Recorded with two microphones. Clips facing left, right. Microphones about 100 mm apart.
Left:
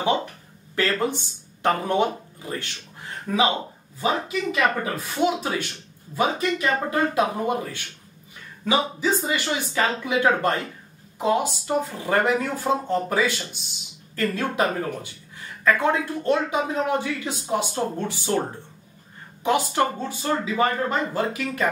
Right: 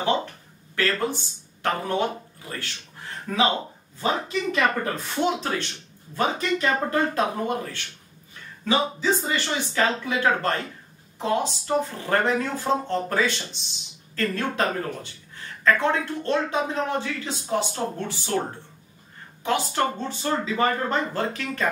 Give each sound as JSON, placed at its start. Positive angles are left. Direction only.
{"t": 0.0, "sound": "speech", "side_deg": 15}
{"t": 19.4, "sound": "speech", "side_deg": 15}